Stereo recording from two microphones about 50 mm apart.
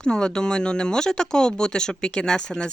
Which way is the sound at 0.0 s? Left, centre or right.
Centre.